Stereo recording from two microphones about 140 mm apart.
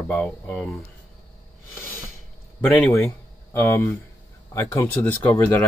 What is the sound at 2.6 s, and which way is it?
Speech, 15° left (ahead or behind).